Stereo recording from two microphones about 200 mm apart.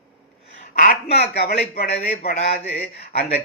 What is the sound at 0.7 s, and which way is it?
A man's voice, 45° left (ahead or behind).